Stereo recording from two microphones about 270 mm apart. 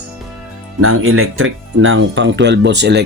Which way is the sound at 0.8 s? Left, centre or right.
Right.